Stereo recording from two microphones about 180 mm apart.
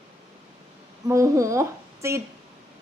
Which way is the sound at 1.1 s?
15° right (ahead or behind).